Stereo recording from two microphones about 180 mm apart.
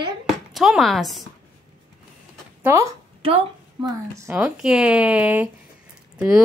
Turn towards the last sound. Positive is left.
turn(degrees=-5)  # may be behind; listen again after turning